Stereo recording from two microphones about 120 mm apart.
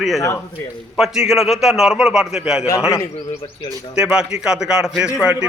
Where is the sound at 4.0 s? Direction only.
5° right (ahead or behind).